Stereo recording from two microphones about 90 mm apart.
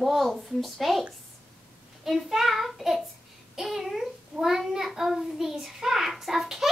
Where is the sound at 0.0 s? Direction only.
Centre (ahead or behind).